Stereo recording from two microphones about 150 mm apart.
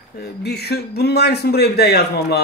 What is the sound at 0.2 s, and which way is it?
Speech, 90° left.